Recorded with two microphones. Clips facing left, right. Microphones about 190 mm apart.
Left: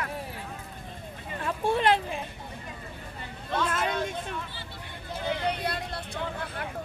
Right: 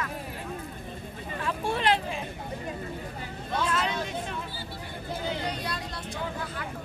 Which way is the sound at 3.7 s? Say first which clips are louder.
Even; 50° left (ahead or behind).